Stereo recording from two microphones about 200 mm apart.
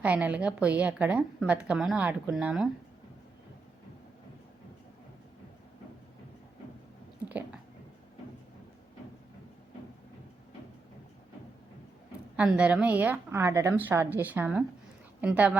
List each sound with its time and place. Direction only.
0.0 s a woman's voice: 5° right (ahead or behind)
7.3 s a sound: 10° right (ahead or behind)
12.4 s a woman's voice: 5° right (ahead or behind)